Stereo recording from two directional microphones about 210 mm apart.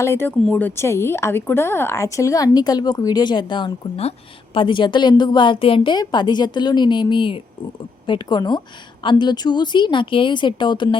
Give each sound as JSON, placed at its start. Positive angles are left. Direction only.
{"t": 0.0, "sound": "a woman's voice", "side_deg": 10}